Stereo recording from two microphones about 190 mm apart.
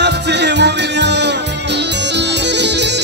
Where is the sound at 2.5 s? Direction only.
65° right (ahead or behind).